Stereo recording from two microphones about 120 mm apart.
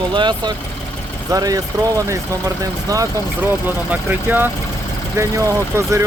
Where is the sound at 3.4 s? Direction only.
15° right (ahead or behind).